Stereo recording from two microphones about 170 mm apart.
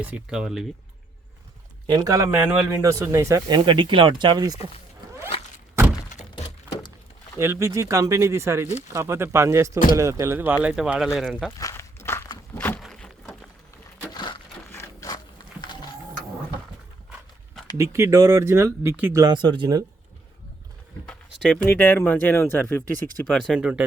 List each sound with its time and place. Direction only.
0.0 s speech: 5° right (ahead or behind)
1.9 s speech: 20° right (ahead or behind)
7.3 s speech: 15° right (ahead or behind); by 11.5 s centre (ahead or behind)
11.5 s a sound: 20° left (ahead or behind); by 13.3 s centre (ahead or behind)
14.1 s a sound: 25° left (ahead or behind)
17.7 s speech: 15° right (ahead or behind)
19.2 s speech: 25° right (ahead or behind)
21.3 s speech: centre (ahead or behind)
23.6 s speech: 5° right (ahead or behind)